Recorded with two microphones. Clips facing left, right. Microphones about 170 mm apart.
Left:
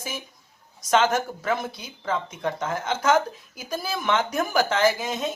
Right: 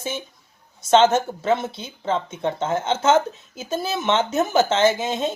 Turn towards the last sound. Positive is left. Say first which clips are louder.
# right 3 dB
turn(degrees=-25)  # may be behind; listen again after turning